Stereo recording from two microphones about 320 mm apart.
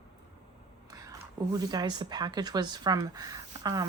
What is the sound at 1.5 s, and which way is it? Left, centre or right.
Speech, centre.